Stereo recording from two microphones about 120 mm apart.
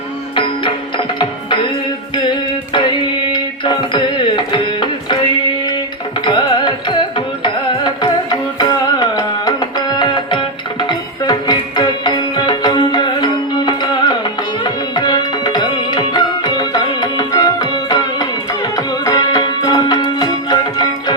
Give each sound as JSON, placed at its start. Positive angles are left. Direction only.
{"t": 0.3, "sound": "music", "side_deg": 45}
{"t": 6.2, "sound": "carnatic music", "side_deg": 40}
{"t": 7.4, "sound": "music", "side_deg": 40}